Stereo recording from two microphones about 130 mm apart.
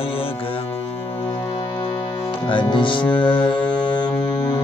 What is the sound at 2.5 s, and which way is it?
Speech, 35° left (ahead or behind).